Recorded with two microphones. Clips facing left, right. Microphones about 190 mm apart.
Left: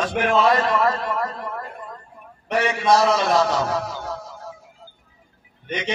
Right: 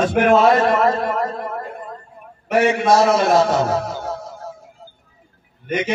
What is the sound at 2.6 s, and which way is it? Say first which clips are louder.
Speech: right 4 dB; 50° right (ahead or behind).